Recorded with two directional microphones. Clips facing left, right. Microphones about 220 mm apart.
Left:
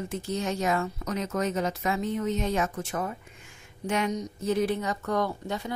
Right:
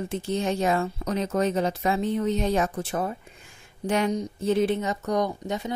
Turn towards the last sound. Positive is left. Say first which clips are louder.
# right 3 dB
turn(degrees=-20)  # may be behind; listen again after turning